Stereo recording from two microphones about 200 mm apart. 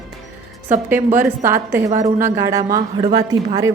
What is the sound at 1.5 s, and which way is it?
A woman's voice, 10° right (ahead or behind).